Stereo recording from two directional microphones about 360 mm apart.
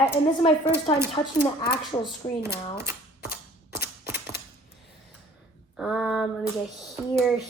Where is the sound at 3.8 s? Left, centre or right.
Centre.